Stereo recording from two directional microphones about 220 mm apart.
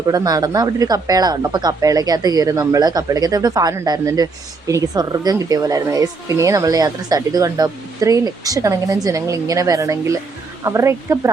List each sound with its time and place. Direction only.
0.1 s speech: 15° right (ahead or behind)